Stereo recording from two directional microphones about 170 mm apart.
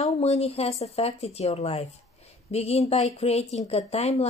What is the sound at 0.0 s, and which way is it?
A woman's voice, 40° left (ahead or behind).